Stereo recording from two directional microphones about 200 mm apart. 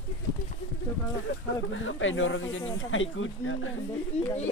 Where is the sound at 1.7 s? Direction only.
75° left (ahead or behind).